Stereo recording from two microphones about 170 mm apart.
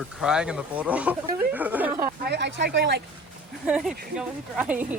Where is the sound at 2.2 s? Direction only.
80° right.